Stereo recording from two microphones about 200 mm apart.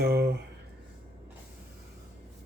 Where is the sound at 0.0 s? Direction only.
50° right (ahead or behind).